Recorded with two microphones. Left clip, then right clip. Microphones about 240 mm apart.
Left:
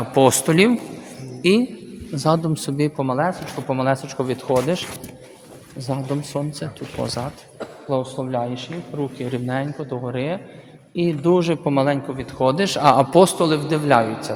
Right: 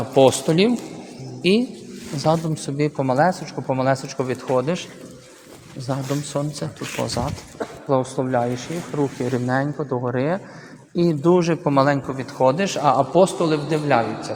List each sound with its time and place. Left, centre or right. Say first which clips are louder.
0.1 s speech: right 1 dB; centre
1.4 s a man's voice: left 1 dB; centre
3.1 s speech: right 5 dB; centre
3.7 s speech: even; centre
5.9 s speech: even; centre
11.7 s speech: right 4 dB; centre
12.5 s a man's voice: left 2 dB; centre
12.8 s a man's voice: left 3 dB; left; by 14.3 s centre